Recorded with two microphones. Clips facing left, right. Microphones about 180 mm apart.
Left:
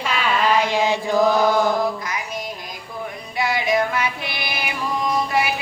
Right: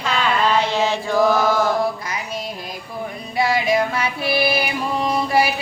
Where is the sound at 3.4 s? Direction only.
30° right (ahead or behind).